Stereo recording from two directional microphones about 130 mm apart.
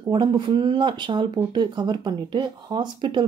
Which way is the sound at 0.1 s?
35° right (ahead or behind).